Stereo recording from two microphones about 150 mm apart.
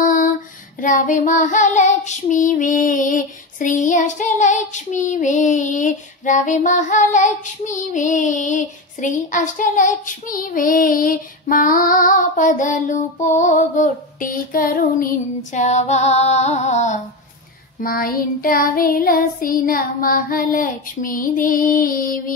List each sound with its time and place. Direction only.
0.0 s female singing: 60° left (ahead or behind)
0.7 s child singing: 55° left (ahead or behind)
17.7 s child singing: 70° left (ahead or behind)